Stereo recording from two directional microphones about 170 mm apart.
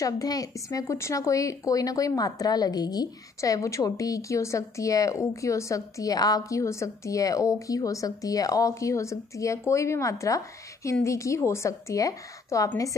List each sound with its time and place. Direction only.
0.0 s a woman's voice: 20° left (ahead or behind)